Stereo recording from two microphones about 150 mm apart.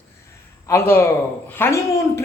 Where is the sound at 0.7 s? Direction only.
15° left (ahead or behind).